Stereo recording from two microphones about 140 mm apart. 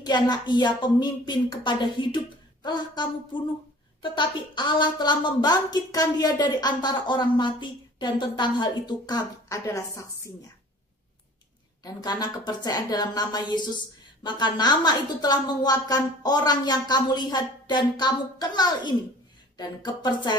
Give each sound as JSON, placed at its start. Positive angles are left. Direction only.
{"t": 0.0, "sound": "a woman's voice", "side_deg": 30}
{"t": 11.8, "sound": "a woman's voice", "side_deg": 30}